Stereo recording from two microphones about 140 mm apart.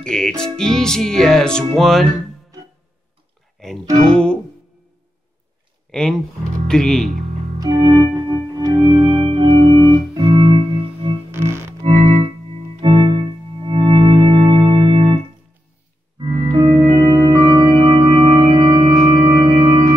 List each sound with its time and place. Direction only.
0.0 s speech: 5° left (ahead or behind)
3.6 s music: 5° left (ahead or behind)
5.9 s music: 5° left (ahead or behind)
6.7 s speech: 5° left (ahead or behind)
7.6 s music: 30° right (ahead or behind)
11.3 s music: 20° right (ahead or behind)
11.8 s music: 45° right (ahead or behind)
16.2 s music: 35° right (ahead or behind)